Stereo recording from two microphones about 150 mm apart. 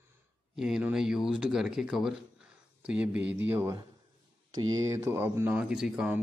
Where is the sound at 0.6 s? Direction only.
5° right (ahead or behind).